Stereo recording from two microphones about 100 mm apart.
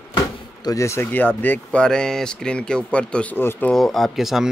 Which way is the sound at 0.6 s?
30° left (ahead or behind).